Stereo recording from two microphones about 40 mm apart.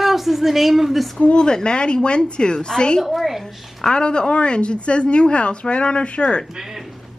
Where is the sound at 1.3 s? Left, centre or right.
Centre.